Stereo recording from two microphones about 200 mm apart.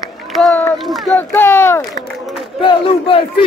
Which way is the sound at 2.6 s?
25° left (ahead or behind).